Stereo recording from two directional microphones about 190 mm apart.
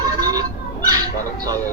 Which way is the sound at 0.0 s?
20° right (ahead or behind).